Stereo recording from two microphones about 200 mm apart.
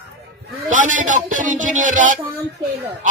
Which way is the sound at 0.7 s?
40° right (ahead or behind).